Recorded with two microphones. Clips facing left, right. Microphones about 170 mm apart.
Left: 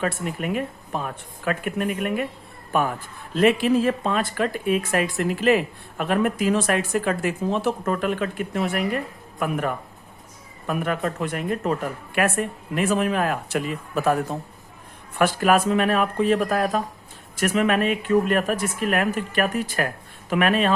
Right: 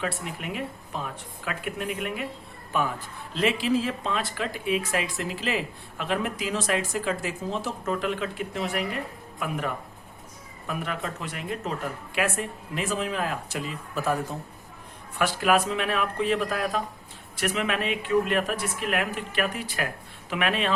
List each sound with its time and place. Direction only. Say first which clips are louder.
0.0 s speech: left 6 dB; 50° left (ahead or behind)
10.7 s speech: left 7 dB; 50° left (ahead or behind)
15.2 s speech: left 4 dB; 45° left (ahead or behind)